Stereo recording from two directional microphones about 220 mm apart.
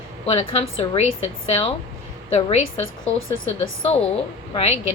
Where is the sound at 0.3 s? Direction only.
25° left (ahead or behind).